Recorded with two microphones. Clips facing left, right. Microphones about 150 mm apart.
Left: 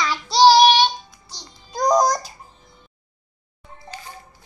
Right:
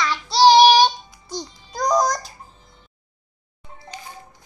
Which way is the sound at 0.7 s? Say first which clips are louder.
Right 2 dB; 40° right (ahead or behind).